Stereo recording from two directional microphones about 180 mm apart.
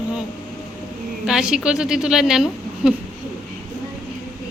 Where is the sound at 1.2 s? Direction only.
5° right (ahead or behind).